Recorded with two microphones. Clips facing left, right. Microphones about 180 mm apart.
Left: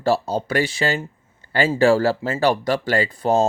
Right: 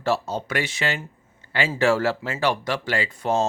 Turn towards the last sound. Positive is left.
turn(degrees=35)  # may be behind; listen again after turning